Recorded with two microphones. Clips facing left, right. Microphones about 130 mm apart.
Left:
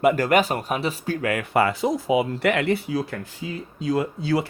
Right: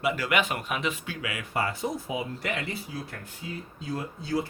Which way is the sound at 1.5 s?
75° left (ahead or behind).